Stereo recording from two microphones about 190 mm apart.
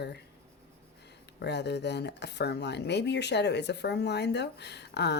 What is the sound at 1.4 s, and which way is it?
Speech, 60° left (ahead or behind).